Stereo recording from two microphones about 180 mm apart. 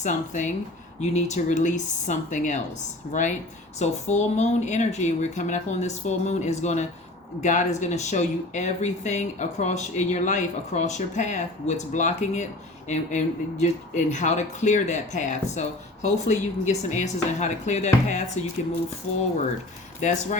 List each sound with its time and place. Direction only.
0.0 s speech: 45° left (ahead or behind)
20.0 s speech: 40° left (ahead or behind)